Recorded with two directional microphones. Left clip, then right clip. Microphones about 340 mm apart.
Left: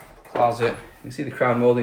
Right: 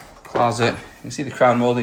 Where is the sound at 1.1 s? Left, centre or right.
Centre.